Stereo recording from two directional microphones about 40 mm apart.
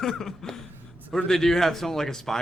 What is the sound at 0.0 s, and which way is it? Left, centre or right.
Speech, centre.